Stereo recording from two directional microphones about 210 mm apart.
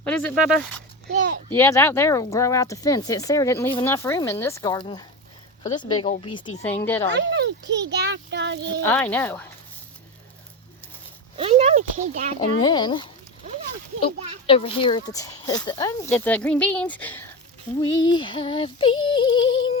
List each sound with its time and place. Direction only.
0.0 s speech: 5° left (ahead or behind)
1.5 s speech: 10° left (ahead or behind)
6.6 s speech: 10° left (ahead or behind)
7.3 s a child's voice: 55° right (ahead or behind)
8.8 s speech: 10° left (ahead or behind)
11.3 s speech: 25° right (ahead or behind)
12.4 s speech: 20° left (ahead or behind)
14.4 s speech: 25° left (ahead or behind); by 17.2 s 10° left (ahead or behind)
17.7 s female singing: 20° left (ahead or behind)